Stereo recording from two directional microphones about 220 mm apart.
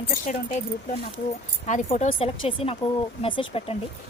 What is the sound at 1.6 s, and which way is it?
A woman's voice, 35° left (ahead or behind).